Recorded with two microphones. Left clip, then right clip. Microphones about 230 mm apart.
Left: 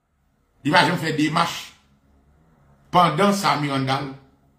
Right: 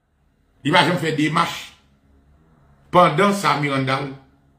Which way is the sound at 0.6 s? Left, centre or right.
Centre.